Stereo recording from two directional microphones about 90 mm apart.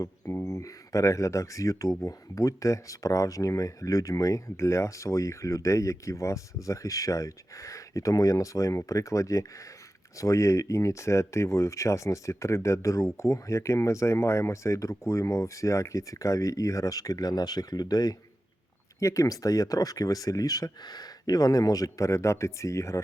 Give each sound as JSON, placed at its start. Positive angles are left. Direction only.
{"t": 0.4, "sound": "speech", "side_deg": 40}